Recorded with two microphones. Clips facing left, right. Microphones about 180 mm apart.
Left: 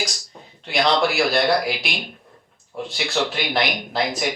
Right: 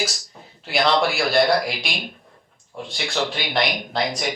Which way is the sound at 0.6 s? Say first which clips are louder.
Even; centre (ahead or behind).